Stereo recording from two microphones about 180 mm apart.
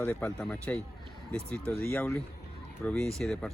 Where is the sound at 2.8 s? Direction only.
5° left (ahead or behind).